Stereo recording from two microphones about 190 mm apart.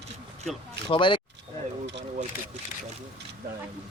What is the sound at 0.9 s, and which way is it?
Speech, 25° left (ahead or behind).